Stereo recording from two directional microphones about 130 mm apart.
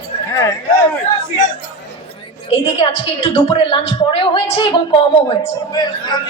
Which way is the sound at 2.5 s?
45° left (ahead or behind).